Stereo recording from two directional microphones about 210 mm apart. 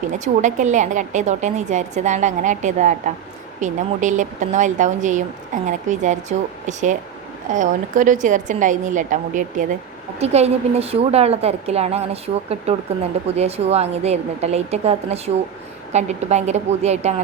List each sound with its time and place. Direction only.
0.4 s a woman's voice: 35° right (ahead or behind)